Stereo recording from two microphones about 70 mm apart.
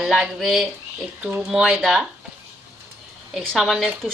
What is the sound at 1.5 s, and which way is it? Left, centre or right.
Speech, centre.